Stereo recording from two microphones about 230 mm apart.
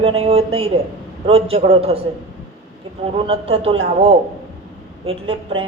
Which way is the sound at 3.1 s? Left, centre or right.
Right.